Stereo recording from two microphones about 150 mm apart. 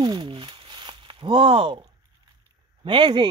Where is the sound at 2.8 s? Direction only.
30° right (ahead or behind).